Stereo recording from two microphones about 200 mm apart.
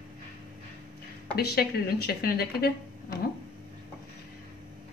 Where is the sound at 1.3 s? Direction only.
50° left (ahead or behind).